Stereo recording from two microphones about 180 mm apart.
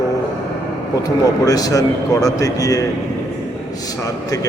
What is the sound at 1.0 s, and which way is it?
A man's voice, 20° left (ahead or behind).